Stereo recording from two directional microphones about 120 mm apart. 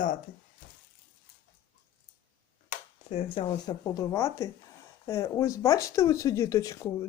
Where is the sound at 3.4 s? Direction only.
35° left (ahead or behind).